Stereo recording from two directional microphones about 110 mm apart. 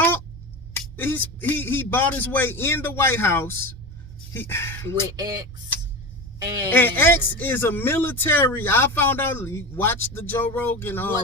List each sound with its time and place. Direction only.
0.9 s speech: 15° left (ahead or behind)
5.1 s speech: 35° right (ahead or behind)
6.7 s speech: 15° left (ahead or behind)